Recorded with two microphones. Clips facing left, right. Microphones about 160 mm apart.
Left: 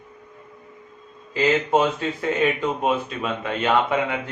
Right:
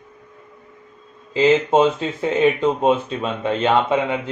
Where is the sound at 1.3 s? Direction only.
20° right (ahead or behind).